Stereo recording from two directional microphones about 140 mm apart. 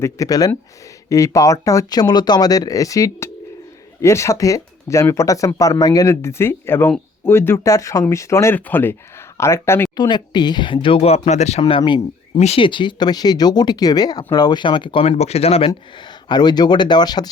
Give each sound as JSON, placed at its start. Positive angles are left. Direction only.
{"t": 0.0, "sound": "speech", "side_deg": 25}
{"t": 9.9, "sound": "speech", "side_deg": 30}
{"t": 15.2, "sound": "speech", "side_deg": 45}